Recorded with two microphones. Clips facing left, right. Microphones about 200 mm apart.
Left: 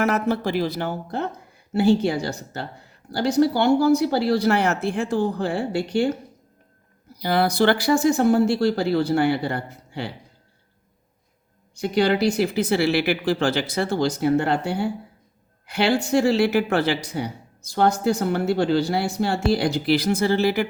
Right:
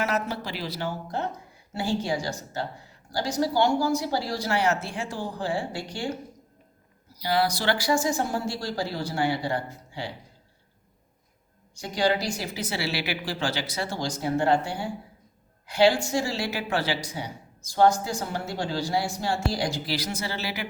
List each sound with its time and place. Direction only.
0.0 s speech: 55° left (ahead or behind)
11.7 s speech: 60° left (ahead or behind)